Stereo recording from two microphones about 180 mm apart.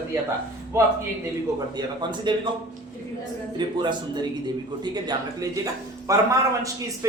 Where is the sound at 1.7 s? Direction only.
25° right (ahead or behind).